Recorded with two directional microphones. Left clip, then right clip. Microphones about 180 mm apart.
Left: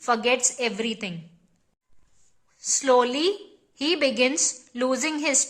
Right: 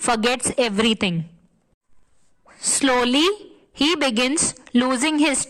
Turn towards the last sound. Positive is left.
turn(degrees=-50)  # may be behind; listen again after turning